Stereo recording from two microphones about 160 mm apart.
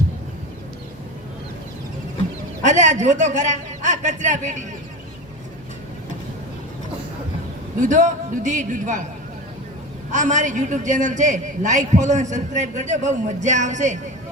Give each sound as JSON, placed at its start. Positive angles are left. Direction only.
{"t": 2.6, "sound": "a man's voice", "side_deg": -50}
{"t": 7.8, "sound": "a man's voice", "side_deg": -50}
{"t": 10.1, "sound": "a man's voice", "side_deg": -50}